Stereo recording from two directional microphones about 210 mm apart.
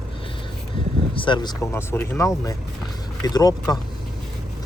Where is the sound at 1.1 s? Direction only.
25° left (ahead or behind).